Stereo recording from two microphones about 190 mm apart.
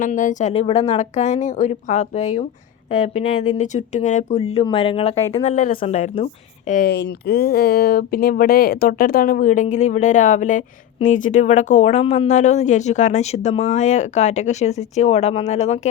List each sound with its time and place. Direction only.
0.0 s speech: 40° left (ahead or behind)
6.7 s speech: 50° left (ahead or behind)